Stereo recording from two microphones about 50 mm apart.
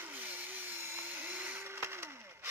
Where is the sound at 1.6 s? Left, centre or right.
Right.